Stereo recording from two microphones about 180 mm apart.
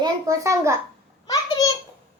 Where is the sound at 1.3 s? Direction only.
20° left (ahead or behind).